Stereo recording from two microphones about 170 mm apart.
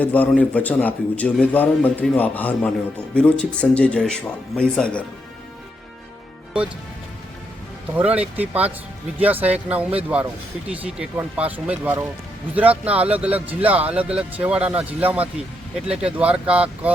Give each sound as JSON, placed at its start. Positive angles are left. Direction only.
{"t": 0.0, "sound": "a man's voice", "side_deg": 10}
{"t": 7.9, "sound": "speech", "side_deg": -10}